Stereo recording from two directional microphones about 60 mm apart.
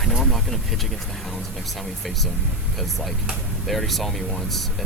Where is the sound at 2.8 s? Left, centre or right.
Centre.